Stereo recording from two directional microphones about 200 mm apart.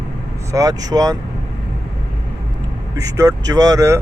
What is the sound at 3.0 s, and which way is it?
Speech, 15° right (ahead or behind).